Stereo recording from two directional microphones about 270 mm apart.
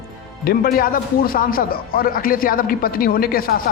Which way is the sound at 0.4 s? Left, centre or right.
Left.